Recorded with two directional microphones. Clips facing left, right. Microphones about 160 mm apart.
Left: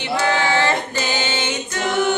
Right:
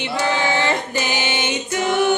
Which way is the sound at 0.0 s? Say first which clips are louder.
Left 1 dB; 15° right (ahead or behind).